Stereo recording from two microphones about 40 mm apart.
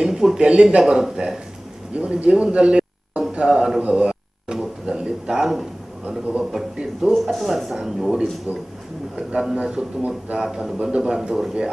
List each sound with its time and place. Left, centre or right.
0.0 s a sound: centre
0.4 s a man's voice: right
2.0 s a man's voice: right
3.2 s a sound: right
3.8 s speech: right
6.8 s speech: centre
7.2 s speech: centre
9.1 s a man's voice: centre